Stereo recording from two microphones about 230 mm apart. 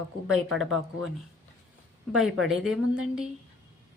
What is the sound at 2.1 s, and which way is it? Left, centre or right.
A woman's voice, centre.